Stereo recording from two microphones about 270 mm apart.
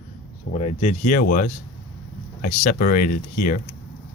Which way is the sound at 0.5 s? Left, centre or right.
Left.